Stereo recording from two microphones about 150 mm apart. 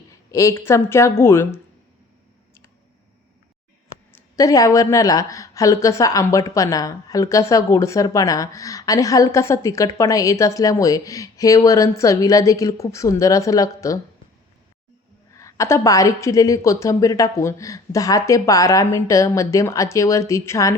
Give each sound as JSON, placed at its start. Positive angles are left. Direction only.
{"t": 0.1, "sound": "a woman's voice", "side_deg": 20}
{"t": 4.1, "sound": "a woman's voice", "side_deg": 20}
{"t": 15.4, "sound": "a woman's voice", "side_deg": 20}